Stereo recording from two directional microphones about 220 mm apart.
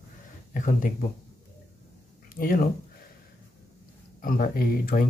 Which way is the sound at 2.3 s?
40° left (ahead or behind).